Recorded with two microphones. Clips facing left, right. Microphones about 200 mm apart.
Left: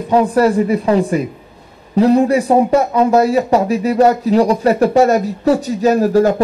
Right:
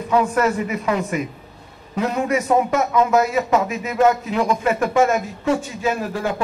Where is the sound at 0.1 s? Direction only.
35° left (ahead or behind).